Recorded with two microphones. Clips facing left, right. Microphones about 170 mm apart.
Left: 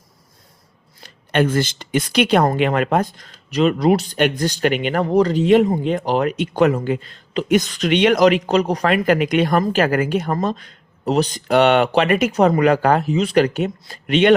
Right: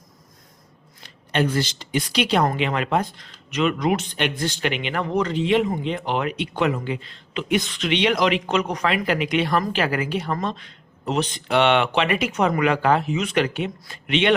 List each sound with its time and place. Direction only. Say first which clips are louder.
1.0 s speech: left 4 dB; 50° left (ahead or behind); by 8.9 s 35° left (ahead or behind)
8.9 s speech: left 6 dB; 45° left (ahead or behind)